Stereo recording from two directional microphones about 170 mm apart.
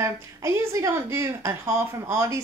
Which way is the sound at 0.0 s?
15° right (ahead or behind).